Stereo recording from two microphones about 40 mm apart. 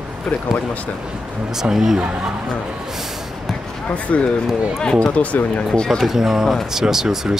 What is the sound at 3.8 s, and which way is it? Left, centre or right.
Speech, left.